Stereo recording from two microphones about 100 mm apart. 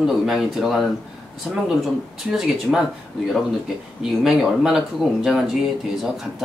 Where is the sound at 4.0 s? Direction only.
5° right (ahead or behind).